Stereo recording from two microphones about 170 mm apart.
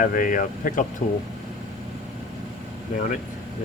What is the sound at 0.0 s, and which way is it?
Speech, 55° left (ahead or behind).